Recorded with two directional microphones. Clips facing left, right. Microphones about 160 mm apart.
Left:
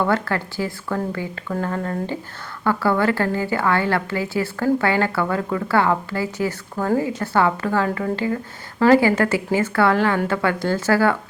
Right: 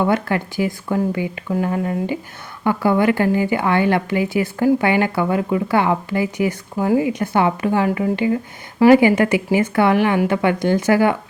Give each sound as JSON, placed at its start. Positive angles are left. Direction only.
{"t": 0.0, "sound": "a woman's voice", "side_deg": -15}